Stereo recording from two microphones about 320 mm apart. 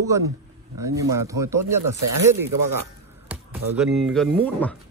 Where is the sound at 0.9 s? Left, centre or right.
Centre.